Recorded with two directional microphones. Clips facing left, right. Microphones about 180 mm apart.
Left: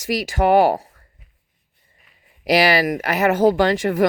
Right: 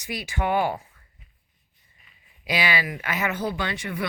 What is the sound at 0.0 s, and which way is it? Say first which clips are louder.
Speech: left 9 dB; 90° left.